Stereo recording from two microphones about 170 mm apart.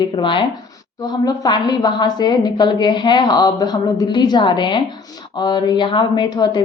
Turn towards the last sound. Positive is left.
turn(degrees=25)  # may be behind; listen again after turning